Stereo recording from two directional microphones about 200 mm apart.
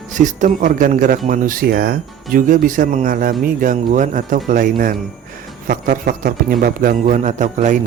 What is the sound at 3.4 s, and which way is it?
Music, 45° right (ahead or behind).